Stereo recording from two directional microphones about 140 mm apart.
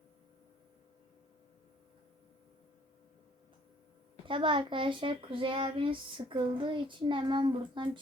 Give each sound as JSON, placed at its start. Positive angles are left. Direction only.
{"t": 4.3, "sound": "a child's voice", "side_deg": -35}